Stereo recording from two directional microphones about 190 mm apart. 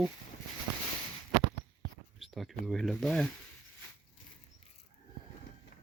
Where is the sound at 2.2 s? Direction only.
Centre (ahead or behind).